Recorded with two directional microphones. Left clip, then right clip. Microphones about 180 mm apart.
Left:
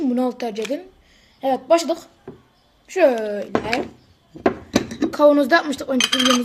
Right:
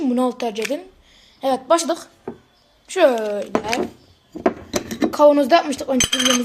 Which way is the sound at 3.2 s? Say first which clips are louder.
Right 1 dB; 30° right (ahead or behind).